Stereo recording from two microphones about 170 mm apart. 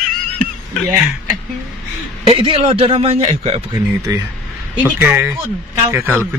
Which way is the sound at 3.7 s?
20° right (ahead or behind).